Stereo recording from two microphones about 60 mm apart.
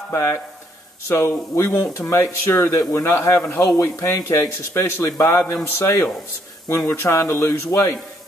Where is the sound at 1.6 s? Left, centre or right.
Left.